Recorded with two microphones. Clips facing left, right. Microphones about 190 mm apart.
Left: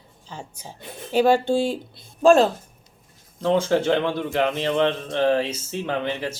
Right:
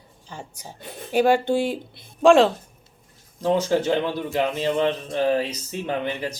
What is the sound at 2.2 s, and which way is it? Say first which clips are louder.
Speech: right 1 dB; 90° right.